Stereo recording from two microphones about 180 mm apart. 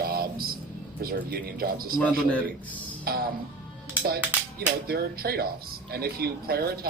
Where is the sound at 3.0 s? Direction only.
55° right (ahead or behind).